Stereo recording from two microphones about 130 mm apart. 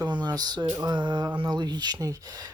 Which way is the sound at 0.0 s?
30° right (ahead or behind).